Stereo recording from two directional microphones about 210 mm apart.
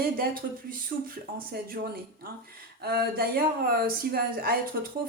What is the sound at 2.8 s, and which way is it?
A woman's voice, 45° right (ahead or behind).